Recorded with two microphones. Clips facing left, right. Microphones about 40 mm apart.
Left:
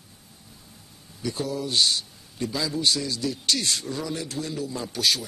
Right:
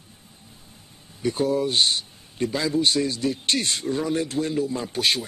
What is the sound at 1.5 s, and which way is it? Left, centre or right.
A man's voice, right.